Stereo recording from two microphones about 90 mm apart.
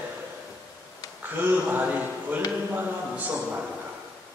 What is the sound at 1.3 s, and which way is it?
Speech, 20° right (ahead or behind).